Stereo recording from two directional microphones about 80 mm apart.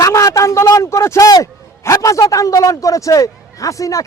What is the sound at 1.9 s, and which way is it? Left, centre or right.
A man's voice, left.